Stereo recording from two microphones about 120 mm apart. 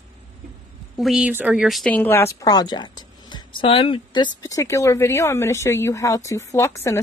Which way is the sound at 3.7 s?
50° left (ahead or behind).